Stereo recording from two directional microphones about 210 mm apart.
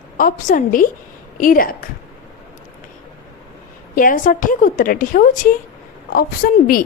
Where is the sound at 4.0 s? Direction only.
40° left (ahead or behind).